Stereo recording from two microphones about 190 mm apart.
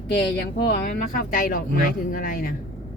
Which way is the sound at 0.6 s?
55° left (ahead or behind).